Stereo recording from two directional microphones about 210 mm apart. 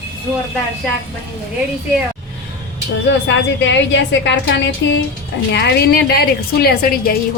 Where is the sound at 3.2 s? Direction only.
60° left (ahead or behind).